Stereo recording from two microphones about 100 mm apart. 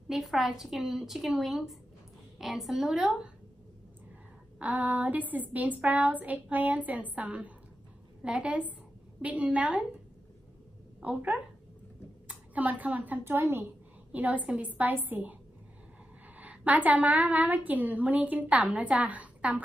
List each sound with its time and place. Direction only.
0.1 s a woman's voice: centre (ahead or behind)
4.6 s a woman's voice: 15° right (ahead or behind)
11.0 s a woman's voice: 15° right (ahead or behind)
16.3 s a woman's voice: 15° right (ahead or behind)